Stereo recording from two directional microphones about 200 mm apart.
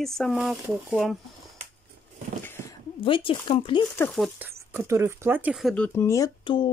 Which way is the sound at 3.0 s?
25° left (ahead or behind).